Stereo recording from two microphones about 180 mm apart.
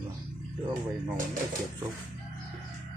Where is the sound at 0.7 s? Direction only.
50° right (ahead or behind).